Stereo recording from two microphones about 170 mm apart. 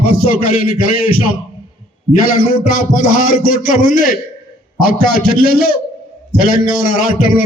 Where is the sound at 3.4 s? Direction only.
50° left (ahead or behind).